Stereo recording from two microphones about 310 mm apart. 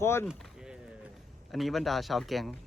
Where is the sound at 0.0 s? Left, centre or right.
Centre.